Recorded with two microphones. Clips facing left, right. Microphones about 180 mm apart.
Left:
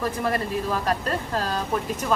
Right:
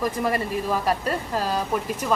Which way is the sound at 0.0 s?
10° right (ahead or behind).